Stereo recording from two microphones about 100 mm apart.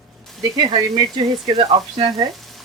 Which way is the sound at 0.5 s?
45° right (ahead or behind).